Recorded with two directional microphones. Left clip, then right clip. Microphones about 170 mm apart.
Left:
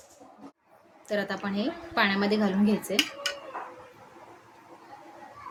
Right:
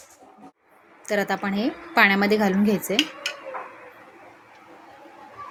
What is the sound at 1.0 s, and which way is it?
A woman's voice, 50° right (ahead or behind).